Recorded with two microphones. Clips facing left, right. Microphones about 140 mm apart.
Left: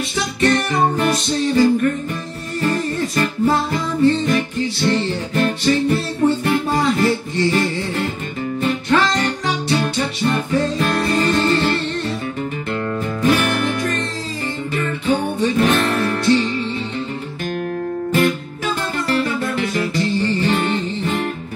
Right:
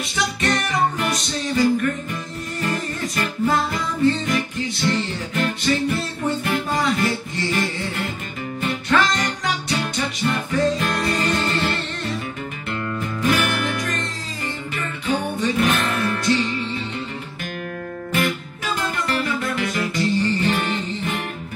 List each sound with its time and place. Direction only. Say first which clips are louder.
0.1 s music: left 5 dB; 35° left (ahead or behind)
3.2 s music: left 3 dB; 35° left (ahead or behind)
18.1 s music: left 4 dB; 35° left (ahead or behind)